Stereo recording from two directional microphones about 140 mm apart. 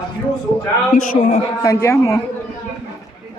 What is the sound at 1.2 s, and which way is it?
Speech, 35° left (ahead or behind).